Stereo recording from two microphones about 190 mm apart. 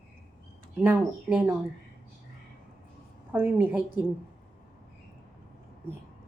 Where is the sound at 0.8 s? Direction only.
10° right (ahead or behind).